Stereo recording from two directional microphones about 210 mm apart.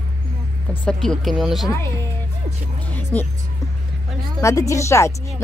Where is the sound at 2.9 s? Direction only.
10° left (ahead or behind).